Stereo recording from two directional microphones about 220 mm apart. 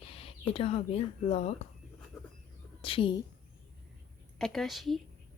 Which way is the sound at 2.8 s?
25° left (ahead or behind).